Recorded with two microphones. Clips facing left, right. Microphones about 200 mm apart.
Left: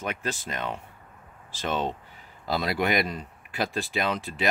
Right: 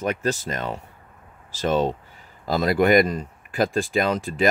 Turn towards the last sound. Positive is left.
turn(degrees=-45)  # may be behind; listen again after turning